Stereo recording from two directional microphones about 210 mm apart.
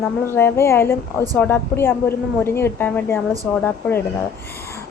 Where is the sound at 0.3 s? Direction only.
10° left (ahead or behind).